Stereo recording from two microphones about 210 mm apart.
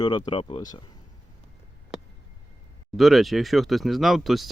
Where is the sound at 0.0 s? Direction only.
20° left (ahead or behind).